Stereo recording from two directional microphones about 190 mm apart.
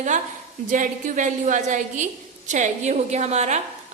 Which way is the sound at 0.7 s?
40° right (ahead or behind).